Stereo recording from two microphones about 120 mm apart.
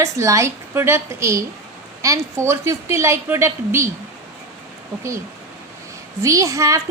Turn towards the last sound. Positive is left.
turn(degrees=-25)  # may be behind; listen again after turning